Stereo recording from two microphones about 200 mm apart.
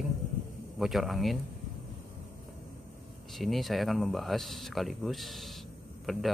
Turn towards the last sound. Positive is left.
turn(degrees=0)  # may be behind; listen again after turning